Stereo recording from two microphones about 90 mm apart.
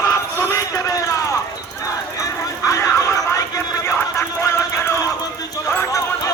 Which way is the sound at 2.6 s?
35° left (ahead or behind).